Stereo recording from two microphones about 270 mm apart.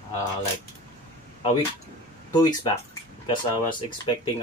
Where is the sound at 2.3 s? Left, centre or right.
Centre.